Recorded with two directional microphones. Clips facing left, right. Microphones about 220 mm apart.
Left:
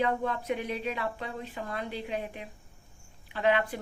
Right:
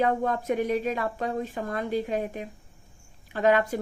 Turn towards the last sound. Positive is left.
turn(degrees=-45)  # may be behind; listen again after turning